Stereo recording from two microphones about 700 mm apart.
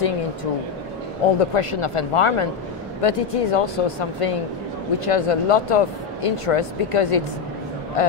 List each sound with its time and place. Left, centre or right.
1.4 s speech: left